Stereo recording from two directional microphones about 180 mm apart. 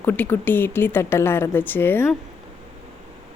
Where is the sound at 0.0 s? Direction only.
10° left (ahead or behind).